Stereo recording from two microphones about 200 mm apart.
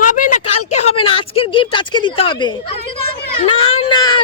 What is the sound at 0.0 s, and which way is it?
Speech, 40° left (ahead or behind).